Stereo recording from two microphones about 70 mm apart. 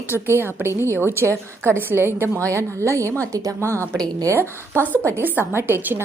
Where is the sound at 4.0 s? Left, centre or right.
Right.